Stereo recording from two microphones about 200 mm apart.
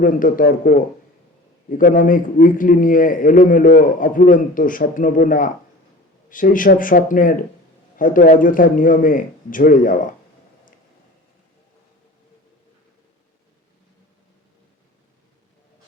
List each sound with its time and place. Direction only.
0.0 s a man's voice: 45° left (ahead or behind)